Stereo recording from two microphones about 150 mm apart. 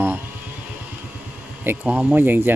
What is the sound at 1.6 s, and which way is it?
Speech, 10° right (ahead or behind).